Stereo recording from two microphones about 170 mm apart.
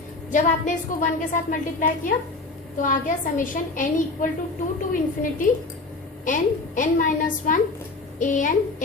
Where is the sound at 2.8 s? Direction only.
50° left (ahead or behind).